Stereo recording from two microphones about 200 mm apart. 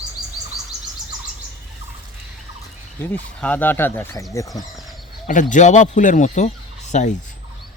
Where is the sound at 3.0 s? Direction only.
10° left (ahead or behind).